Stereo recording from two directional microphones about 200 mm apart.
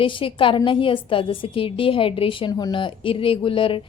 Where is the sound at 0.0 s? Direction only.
25° left (ahead or behind).